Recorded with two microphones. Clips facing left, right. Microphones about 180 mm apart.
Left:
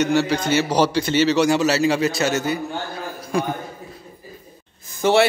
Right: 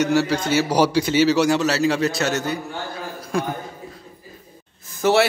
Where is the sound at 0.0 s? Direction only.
5° right (ahead or behind).